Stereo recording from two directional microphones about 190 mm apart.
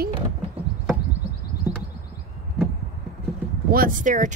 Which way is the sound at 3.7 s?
45° right (ahead or behind).